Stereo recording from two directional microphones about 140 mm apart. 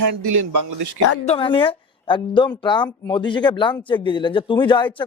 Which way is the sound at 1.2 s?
40° left (ahead or behind).